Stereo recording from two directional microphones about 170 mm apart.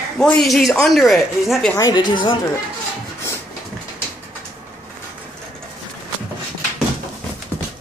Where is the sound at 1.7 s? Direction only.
20° left (ahead or behind).